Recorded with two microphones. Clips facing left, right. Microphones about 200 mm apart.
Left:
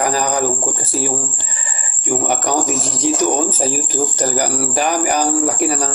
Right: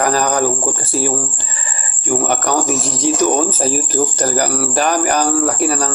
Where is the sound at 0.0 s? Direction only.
15° left (ahead or behind).